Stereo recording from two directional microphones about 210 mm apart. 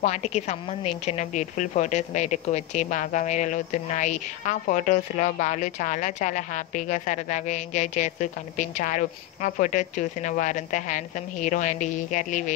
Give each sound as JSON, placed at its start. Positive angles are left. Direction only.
{"t": 0.0, "sound": "a woman's voice", "side_deg": 35}